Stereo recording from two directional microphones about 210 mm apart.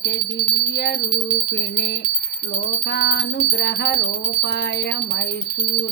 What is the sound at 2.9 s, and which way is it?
Music, 55° left (ahead or behind).